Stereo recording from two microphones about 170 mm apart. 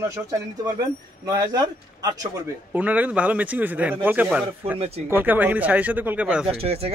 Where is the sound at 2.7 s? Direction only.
10° right (ahead or behind).